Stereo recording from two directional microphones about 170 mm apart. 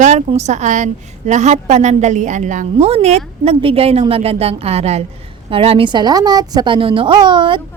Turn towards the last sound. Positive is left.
turn(degrees=-30)  # may be behind; listen again after turning